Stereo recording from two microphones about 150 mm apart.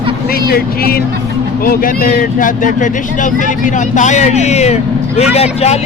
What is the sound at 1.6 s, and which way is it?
Speech, 75° left (ahead or behind).